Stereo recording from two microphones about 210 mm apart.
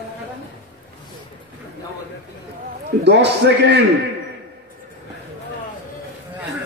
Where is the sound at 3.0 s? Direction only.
55° right (ahead or behind).